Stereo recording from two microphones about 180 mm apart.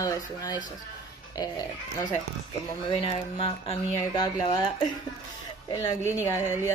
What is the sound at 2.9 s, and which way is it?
Speech, 30° left (ahead or behind).